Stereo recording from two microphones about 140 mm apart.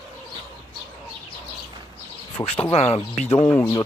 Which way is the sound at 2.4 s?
25° left (ahead or behind).